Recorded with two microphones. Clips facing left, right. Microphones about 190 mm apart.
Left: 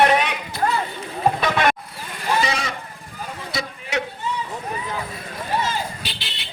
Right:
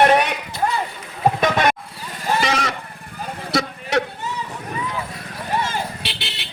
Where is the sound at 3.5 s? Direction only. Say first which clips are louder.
Right 7 dB; 70° right (ahead or behind).